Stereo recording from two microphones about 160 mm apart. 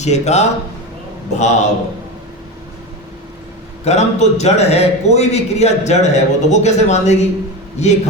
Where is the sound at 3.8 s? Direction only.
45° left (ahead or behind).